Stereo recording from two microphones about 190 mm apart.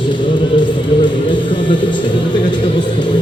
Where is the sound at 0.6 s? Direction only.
25° left (ahead or behind).